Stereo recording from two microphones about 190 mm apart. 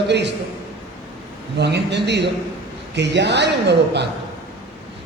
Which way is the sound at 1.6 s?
65° right (ahead or behind).